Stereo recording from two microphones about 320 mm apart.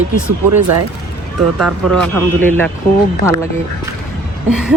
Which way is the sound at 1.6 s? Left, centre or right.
Centre.